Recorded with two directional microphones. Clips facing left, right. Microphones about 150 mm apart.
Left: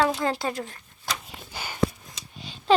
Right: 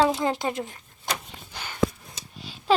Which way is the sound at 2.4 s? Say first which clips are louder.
Left 1 dB; 5° right (ahead or behind).